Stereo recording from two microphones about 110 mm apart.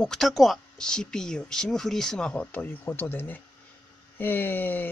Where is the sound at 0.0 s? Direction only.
5° left (ahead or behind).